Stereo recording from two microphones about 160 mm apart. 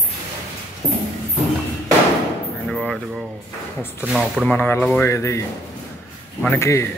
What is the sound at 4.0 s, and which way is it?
Speech, 5° right (ahead or behind).